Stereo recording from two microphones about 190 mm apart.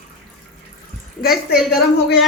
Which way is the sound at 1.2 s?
50° left (ahead or behind).